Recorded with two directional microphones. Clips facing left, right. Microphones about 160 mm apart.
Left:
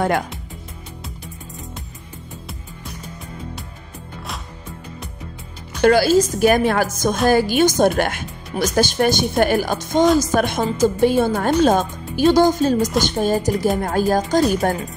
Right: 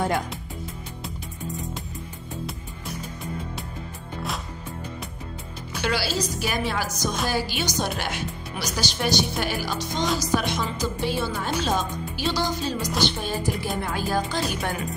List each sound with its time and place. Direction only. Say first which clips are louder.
5.8 s speech: left 13 dB; 50° left (ahead or behind)